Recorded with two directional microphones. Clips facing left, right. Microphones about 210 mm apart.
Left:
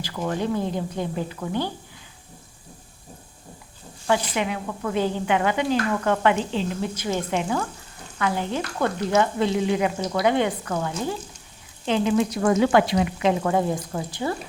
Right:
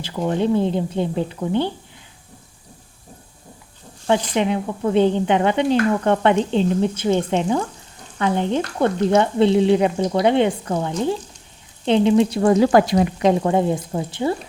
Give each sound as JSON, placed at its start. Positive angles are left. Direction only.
{"t": 0.0, "sound": "speech", "side_deg": -20}
{"t": 4.0, "sound": "speech", "side_deg": -25}
{"t": 11.9, "sound": "sizzle", "side_deg": -30}
{"t": 13.4, "sound": "speech", "side_deg": -20}